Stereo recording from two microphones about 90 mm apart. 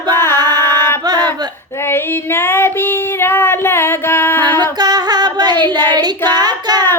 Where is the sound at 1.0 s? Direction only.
50° right (ahead or behind).